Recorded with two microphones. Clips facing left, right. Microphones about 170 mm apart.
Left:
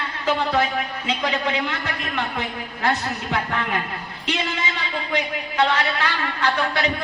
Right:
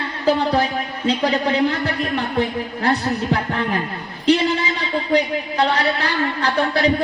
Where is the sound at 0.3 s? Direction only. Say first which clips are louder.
Right 4 dB; 35° right (ahead or behind).